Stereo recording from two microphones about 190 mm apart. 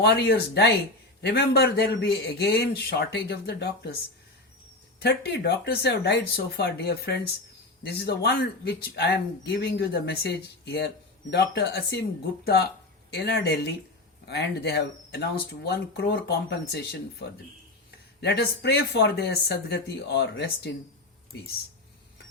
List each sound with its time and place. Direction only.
0.0 s speech: 60° left (ahead or behind)
4.9 s speech: 60° left (ahead or behind)
13.1 s speech: 60° left (ahead or behind)
18.2 s speech: 60° left (ahead or behind)